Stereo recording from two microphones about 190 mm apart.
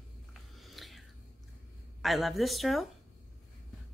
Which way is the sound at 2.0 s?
Centre (ahead or behind).